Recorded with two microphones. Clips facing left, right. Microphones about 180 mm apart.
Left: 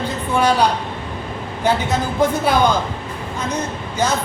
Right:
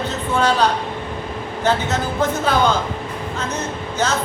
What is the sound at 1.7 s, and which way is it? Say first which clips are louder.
Music: left 1 dB; 10° left (ahead or behind).